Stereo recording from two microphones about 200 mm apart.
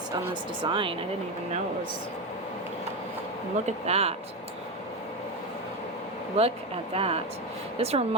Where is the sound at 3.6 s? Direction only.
30° right (ahead or behind).